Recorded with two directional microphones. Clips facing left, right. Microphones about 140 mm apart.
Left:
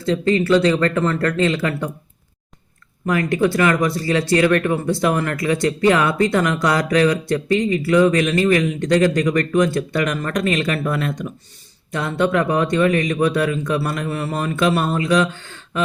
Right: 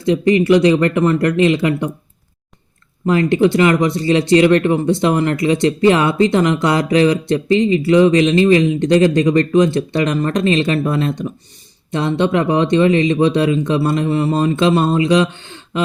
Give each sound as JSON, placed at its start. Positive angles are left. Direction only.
{"t": 0.0, "sound": "speech", "side_deg": -15}
{"t": 3.1, "sound": "speech", "side_deg": -25}